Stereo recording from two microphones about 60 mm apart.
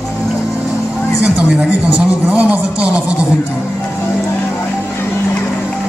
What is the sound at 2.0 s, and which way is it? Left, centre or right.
Speech, right.